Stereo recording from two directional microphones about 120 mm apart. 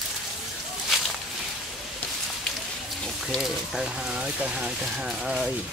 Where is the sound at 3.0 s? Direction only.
Centre (ahead or behind).